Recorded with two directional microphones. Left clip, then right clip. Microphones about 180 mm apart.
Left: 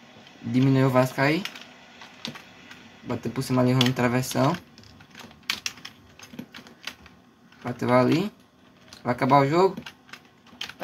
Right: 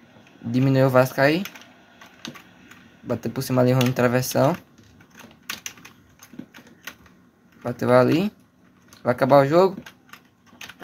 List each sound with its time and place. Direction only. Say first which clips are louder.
0.5 s speech: right 3 dB; 40° right (ahead or behind)
3.1 s speech: right 3 dB; 40° right (ahead or behind)
7.6 s speech: right 4 dB; 45° right (ahead or behind)